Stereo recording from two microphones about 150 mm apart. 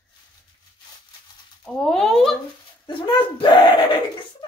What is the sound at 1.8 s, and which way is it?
Speech, centre (ahead or behind).